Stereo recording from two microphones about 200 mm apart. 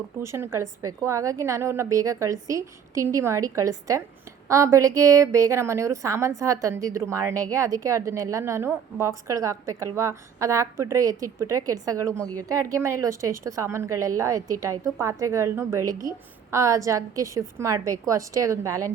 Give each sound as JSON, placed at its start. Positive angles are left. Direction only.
{"t": 0.2, "sound": "a woman's voice", "side_deg": -15}